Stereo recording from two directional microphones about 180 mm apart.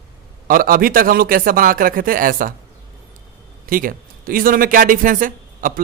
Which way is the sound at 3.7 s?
50° right (ahead or behind).